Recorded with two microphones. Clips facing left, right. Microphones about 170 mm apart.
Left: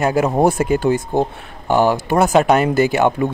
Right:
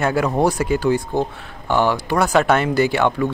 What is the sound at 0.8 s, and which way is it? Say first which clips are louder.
Speech: left 2 dB; 20° left (ahead or behind).